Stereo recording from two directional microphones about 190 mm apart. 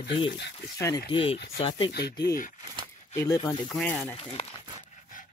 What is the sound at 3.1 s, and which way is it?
Speech, 15° left (ahead or behind).